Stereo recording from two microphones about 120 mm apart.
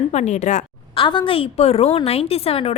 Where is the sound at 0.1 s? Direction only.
80° left.